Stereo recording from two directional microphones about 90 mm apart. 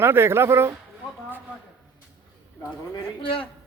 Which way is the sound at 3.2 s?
80° left.